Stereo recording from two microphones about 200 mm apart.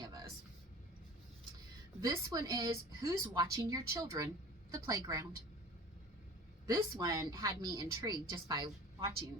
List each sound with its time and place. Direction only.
0.0 s a sound: 20° right (ahead or behind)
2.0 s a woman's voice: 20° right (ahead or behind)
6.7 s a woman's voice: 15° right (ahead or behind)